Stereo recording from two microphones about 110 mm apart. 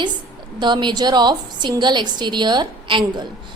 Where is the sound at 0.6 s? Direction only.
45° right (ahead or behind).